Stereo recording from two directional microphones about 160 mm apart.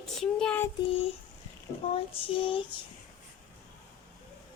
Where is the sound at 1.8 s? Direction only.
35° left (ahead or behind).